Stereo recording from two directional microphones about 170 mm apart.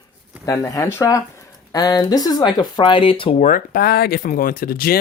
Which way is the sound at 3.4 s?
50° left (ahead or behind).